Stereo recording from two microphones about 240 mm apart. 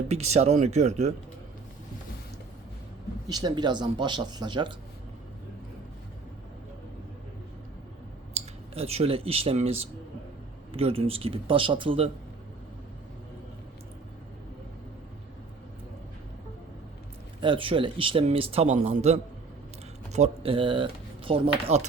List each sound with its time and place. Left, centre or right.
0.1 s a man's voice: right
3.2 s a man's voice: centre
8.3 s a man's voice: right
17.4 s a man's voice: right